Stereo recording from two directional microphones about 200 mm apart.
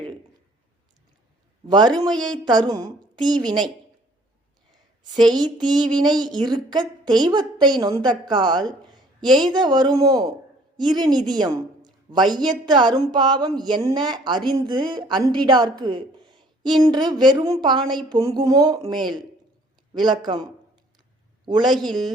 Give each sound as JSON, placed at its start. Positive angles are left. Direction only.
{"t": 1.6, "sound": "a man's voice", "side_deg": -20}
{"t": 5.2, "sound": "a woman's voice", "side_deg": -20}